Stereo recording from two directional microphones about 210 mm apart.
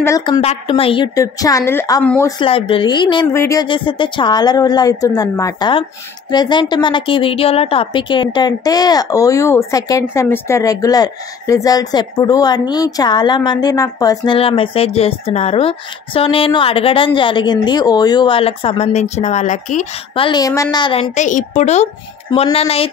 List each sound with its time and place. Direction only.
0.0 s a woman's voice: 20° left (ahead or behind)
2.4 s a woman's voice: 25° left (ahead or behind)
20.2 s a woman's voice: 15° left (ahead or behind)